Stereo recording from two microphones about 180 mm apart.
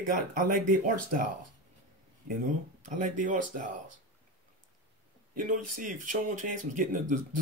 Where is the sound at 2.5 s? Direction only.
45° right (ahead or behind).